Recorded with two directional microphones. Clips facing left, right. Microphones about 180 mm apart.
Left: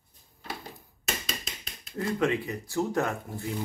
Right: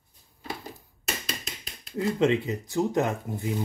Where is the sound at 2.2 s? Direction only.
20° right (ahead or behind).